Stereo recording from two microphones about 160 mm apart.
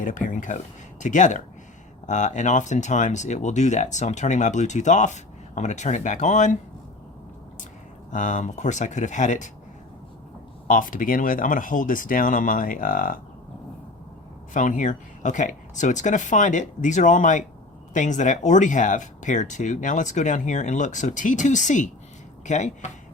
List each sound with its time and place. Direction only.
0.0 s speech: 55° left (ahead or behind)
8.1 s speech: 50° left (ahead or behind)
10.7 s speech: 60° left (ahead or behind)
14.5 s speech: 50° left (ahead or behind)